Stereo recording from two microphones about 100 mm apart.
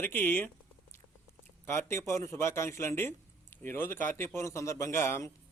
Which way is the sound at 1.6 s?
25° left (ahead or behind).